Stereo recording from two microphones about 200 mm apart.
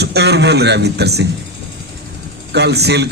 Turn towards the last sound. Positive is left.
turn(degrees=-55)  # may be behind; listen again after turning